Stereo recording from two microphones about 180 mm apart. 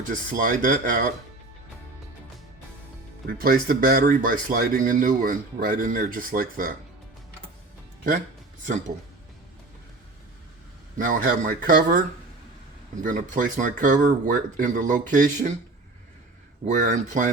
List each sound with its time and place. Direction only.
0.1 s speech: 50° right (ahead or behind)
3.2 s speech: 55° right (ahead or behind)
10.9 s speech: 50° right (ahead or behind)
16.6 s speech: 45° right (ahead or behind)